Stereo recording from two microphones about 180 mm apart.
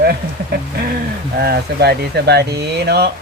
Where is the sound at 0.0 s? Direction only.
60° right (ahead or behind).